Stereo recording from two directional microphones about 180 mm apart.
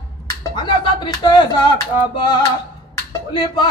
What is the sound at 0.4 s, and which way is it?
Speech, 25° left (ahead or behind).